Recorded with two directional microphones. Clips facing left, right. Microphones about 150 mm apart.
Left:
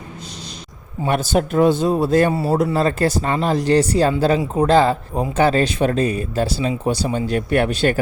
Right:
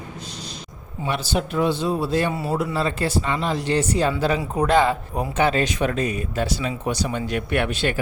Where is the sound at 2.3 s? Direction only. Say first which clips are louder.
Left 6 dB; 35° left (ahead or behind).